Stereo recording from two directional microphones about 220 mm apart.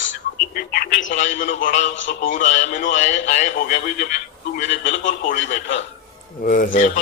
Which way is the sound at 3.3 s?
35° left (ahead or behind).